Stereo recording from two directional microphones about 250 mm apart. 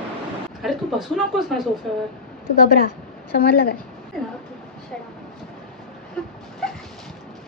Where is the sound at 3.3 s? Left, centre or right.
Left.